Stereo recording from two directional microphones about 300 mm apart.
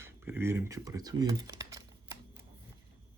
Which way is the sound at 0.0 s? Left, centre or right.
Centre.